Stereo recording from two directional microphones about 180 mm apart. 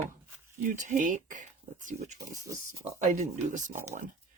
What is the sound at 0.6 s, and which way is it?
Speech, 45° right (ahead or behind).